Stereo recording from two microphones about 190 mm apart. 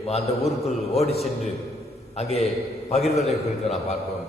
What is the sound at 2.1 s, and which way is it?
Speech, 35° left (ahead or behind).